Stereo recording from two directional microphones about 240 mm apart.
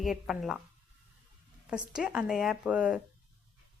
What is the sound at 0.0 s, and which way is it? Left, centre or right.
Speech, centre.